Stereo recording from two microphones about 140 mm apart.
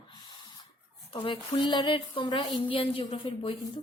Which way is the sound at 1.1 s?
35° left (ahead or behind).